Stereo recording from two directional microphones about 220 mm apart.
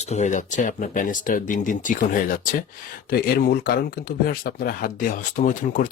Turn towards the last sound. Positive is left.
turn(degrees=35)  # may be behind; listen again after turning